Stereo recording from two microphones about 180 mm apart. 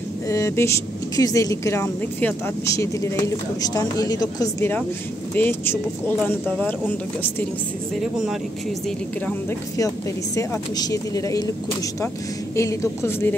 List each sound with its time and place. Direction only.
0.3 s speech: 15° left (ahead or behind)
8.8 s speech: 10° left (ahead or behind)
12.5 s speech: 15° left (ahead or behind)